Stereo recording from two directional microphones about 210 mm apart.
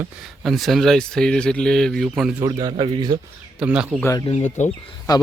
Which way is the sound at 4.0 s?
15° left (ahead or behind).